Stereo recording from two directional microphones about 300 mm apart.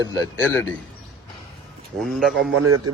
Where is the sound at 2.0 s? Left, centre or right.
Centre.